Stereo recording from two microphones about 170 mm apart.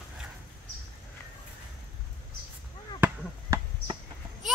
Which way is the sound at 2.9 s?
10° right (ahead or behind).